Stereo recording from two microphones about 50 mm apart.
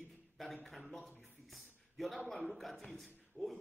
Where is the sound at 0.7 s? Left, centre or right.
Centre.